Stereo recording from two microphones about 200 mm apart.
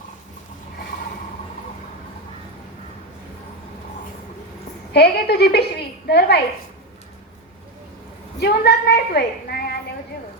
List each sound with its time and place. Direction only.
4.9 s a woman's voice: 55° left (ahead or behind)
8.4 s a woman's voice: 55° left (ahead or behind)